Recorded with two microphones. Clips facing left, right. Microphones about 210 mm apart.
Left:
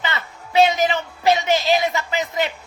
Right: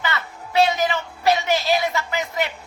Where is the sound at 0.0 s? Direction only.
20° left (ahead or behind).